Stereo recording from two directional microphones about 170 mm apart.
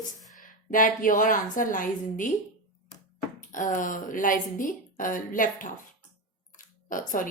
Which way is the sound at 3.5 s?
50° left (ahead or behind).